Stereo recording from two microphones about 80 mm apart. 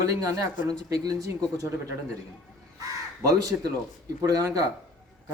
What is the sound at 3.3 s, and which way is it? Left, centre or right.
A man's voice, right.